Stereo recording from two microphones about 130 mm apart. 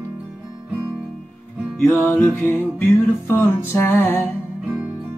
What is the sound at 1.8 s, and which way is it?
Music, 15° left (ahead or behind).